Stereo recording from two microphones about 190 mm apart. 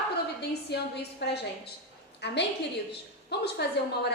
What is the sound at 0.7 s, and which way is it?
A woman's voice, 60° left (ahead or behind).